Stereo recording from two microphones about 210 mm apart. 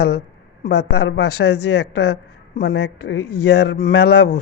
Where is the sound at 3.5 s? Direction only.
50° left (ahead or behind).